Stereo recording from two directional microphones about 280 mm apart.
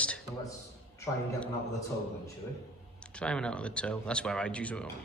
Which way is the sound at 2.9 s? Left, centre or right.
Centre.